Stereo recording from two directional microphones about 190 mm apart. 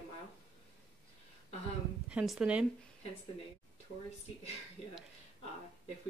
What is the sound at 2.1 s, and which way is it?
Speech, centre (ahead or behind).